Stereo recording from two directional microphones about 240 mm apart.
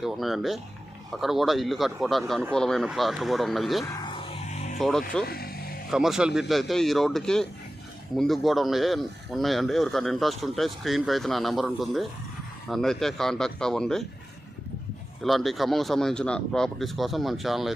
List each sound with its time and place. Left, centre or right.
0.0 s speech: centre
4.0 s music: left
4.8 s speech: centre
5.2 s vehicle: left
5.9 s speech: centre
15.2 s speech: centre